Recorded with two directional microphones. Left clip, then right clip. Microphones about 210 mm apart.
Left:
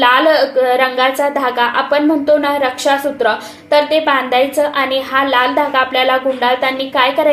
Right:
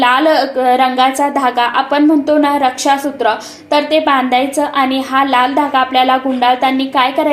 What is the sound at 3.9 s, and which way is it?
A woman's voice, 25° right (ahead or behind).